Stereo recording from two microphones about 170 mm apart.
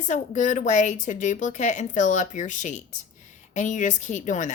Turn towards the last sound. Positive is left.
turn(degrees=45)  # may be behind; listen again after turning